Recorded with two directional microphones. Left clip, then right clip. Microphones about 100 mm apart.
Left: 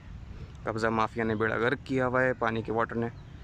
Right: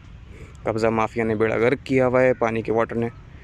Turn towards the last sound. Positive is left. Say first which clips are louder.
# right 7 dB
turn(degrees=-20)  # may be behind; listen again after turning